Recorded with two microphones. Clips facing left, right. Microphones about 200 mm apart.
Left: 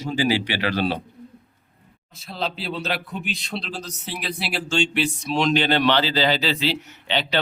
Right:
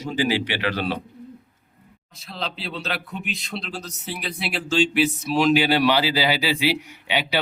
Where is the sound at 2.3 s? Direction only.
Centre (ahead or behind).